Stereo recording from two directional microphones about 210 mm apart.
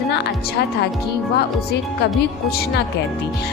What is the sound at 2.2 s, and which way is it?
Speech, 50° left (ahead or behind).